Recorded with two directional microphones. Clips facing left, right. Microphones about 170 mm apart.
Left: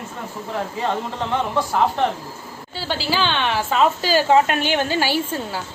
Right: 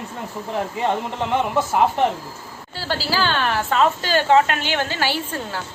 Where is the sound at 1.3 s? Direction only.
15° right (ahead or behind).